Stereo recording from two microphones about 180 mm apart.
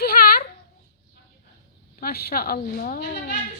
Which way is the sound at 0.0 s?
55° left (ahead or behind).